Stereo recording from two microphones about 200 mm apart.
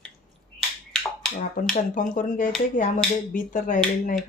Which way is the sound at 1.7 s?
40° left (ahead or behind).